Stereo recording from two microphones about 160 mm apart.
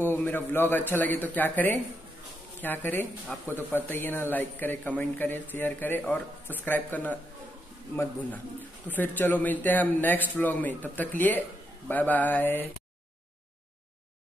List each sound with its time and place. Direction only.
0.0 s speech: 15° left (ahead or behind)